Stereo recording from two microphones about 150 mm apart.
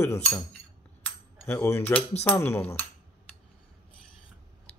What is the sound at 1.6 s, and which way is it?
Speech, 20° left (ahead or behind).